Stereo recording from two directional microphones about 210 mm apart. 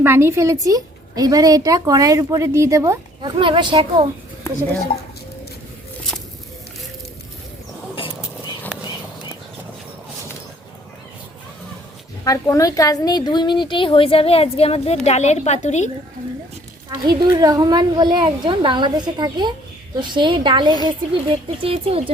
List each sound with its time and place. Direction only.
0.0 s a woman's voice: 10° right (ahead or behind)
12.2 s a woman's voice: 15° left (ahead or behind); by 15.9 s 35° left (ahead or behind)
16.9 s speech: 15° right (ahead or behind)